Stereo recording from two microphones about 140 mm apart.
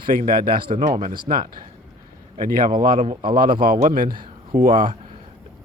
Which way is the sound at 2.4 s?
80° right.